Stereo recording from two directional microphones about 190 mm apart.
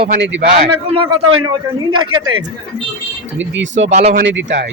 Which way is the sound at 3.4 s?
75° right (ahead or behind).